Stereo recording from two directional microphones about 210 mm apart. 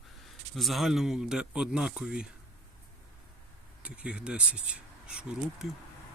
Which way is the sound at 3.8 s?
5° right (ahead or behind).